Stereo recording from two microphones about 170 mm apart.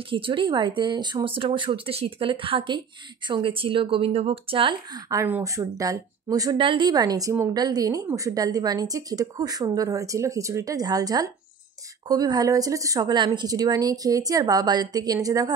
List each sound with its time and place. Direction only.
0.1 s speech: 30° right (ahead or behind)